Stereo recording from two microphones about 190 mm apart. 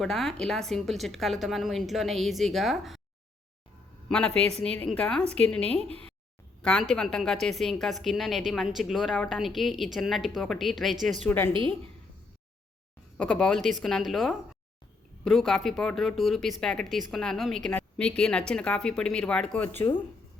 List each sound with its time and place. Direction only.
0.0 s a woman's voice: centre (ahead or behind)
4.3 s a woman's voice: 35° right (ahead or behind)
4.8 s a woman's voice: 5° left (ahead or behind)
13.1 s a woman's voice: 5° left (ahead or behind)